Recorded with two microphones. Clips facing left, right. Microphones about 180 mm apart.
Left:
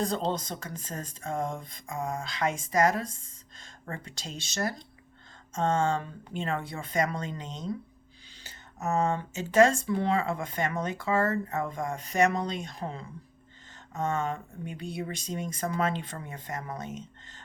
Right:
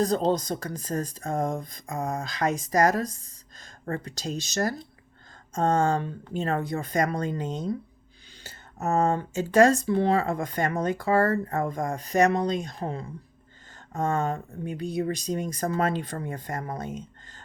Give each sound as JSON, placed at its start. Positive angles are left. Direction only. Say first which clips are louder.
{"t": 0.0, "sound": "speech", "louder": "right 6 dB", "side_deg": -40}
{"t": 8.8, "sound": "speech", "louder": "right 4 dB", "side_deg": -35}
{"t": 13.9, "sound": "speech", "louder": "right 4 dB", "side_deg": -45}